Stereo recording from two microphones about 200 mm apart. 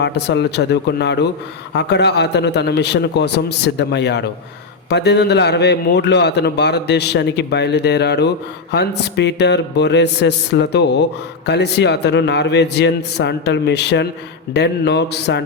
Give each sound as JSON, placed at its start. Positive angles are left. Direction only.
{"t": 0.0, "sound": "a man's voice", "side_deg": 55}